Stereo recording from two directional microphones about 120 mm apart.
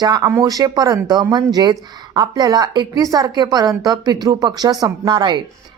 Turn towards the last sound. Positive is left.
turn(degrees=-40)  # may be behind; listen again after turning